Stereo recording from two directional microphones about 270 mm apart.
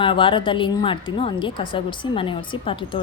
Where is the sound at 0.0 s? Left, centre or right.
Centre.